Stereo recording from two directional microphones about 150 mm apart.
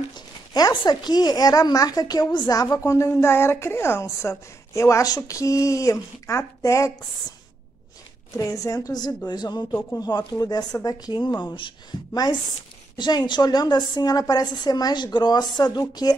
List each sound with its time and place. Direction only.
0.6 s a woman's voice: 25° left (ahead or behind)
8.4 s a woman's voice: 20° left (ahead or behind)